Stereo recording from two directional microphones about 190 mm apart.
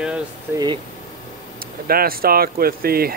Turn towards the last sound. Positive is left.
turn(degrees=-50)  # may be behind; listen again after turning